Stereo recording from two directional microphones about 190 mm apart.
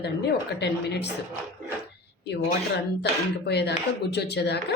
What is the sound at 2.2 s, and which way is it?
Speech, 60° left (ahead or behind).